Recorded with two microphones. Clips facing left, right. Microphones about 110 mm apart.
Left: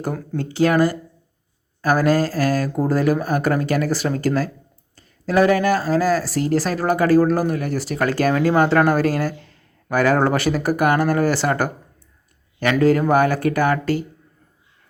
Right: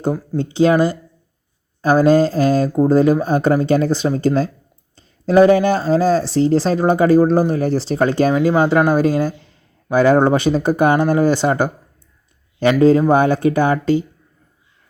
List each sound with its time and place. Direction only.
0.3 s speech: 20° right (ahead or behind)
12.8 s speech: 20° right (ahead or behind)